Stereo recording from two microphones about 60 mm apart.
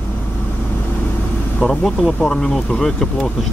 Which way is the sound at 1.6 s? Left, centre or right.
Centre.